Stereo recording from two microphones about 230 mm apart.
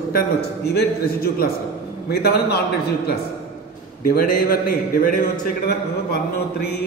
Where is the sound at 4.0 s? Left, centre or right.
Left.